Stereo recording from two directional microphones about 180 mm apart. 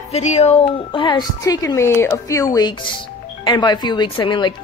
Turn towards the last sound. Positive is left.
turn(degrees=25)  # may be behind; listen again after turning